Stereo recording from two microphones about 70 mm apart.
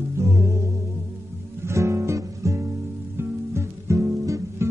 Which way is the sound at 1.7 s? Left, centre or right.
Right.